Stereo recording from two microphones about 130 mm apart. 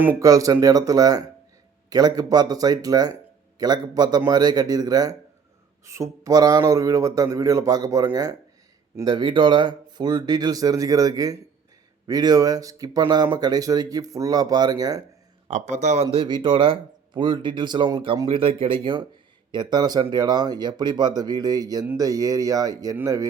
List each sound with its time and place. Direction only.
0.2 s speech: 25° right (ahead or behind)
15.4 s a man's voice: 60° right (ahead or behind)
16.0 s speech: 35° right (ahead or behind)